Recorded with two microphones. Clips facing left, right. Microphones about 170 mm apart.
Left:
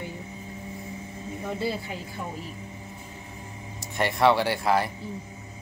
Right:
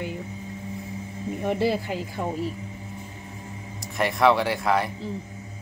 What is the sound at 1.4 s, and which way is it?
Speech, 70° right (ahead or behind).